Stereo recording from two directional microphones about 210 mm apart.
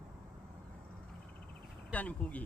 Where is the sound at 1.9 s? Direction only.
5° left (ahead or behind).